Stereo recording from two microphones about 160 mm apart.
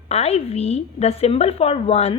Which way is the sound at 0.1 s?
40° left (ahead or behind).